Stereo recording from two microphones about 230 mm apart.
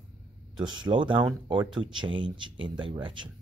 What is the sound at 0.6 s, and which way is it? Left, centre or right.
Speech, right.